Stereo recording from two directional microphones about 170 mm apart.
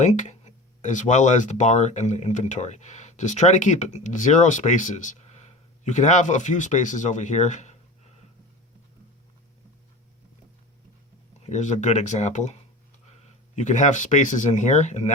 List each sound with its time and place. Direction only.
0.0 s speech: 45° left (ahead or behind)
11.4 s speech: 45° left (ahead or behind)
13.6 s speech: 45° left (ahead or behind)